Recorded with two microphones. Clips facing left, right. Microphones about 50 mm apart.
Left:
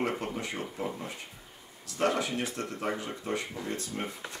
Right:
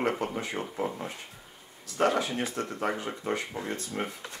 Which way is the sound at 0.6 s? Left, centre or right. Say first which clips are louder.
Right 3 dB; right.